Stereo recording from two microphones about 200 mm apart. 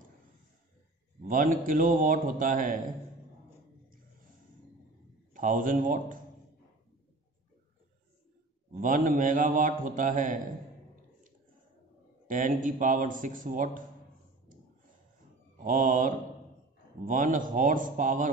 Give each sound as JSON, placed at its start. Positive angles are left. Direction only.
{"t": 1.2, "sound": "a man's voice", "side_deg": -40}
{"t": 5.3, "sound": "a man's voice", "side_deg": -45}
{"t": 8.7, "sound": "a man's voice", "side_deg": -45}
{"t": 12.3, "sound": "a man's voice", "side_deg": -40}
{"t": 15.6, "sound": "a man's voice", "side_deg": -40}